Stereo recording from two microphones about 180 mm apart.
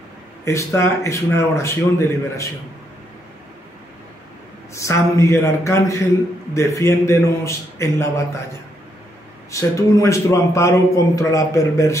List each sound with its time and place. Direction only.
0.5 s a man's voice: 15° left (ahead or behind)
4.7 s a man's voice: 15° left (ahead or behind)
9.5 s a man's voice: 15° left (ahead or behind)